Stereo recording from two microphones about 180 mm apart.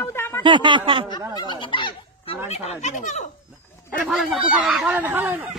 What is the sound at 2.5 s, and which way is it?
Speech, 40° left (ahead or behind).